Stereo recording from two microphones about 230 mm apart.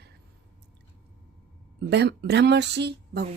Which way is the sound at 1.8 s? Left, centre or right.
Right.